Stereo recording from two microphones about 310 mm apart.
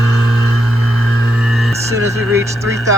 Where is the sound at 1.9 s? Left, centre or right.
Centre.